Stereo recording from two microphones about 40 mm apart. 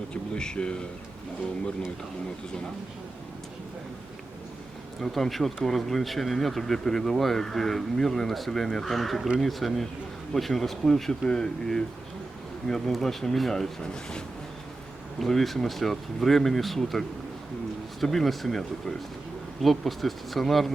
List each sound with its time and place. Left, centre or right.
0.1 s speech: left
4.9 s speech: centre
11.3 s speech: centre
15.2 s speech: centre